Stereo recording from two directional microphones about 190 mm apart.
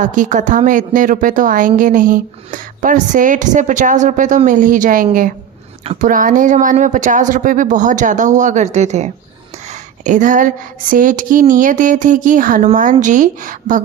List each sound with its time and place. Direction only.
0.0 s a woman's voice: 40° right (ahead or behind)